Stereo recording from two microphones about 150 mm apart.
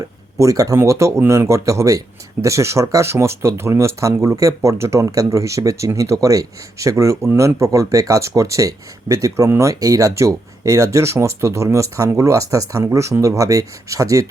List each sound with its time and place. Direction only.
0.3 s speech: 20° right (ahead or behind)